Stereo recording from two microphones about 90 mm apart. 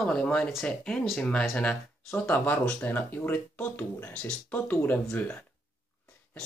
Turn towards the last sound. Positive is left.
turn(degrees=15)  # may be behind; listen again after turning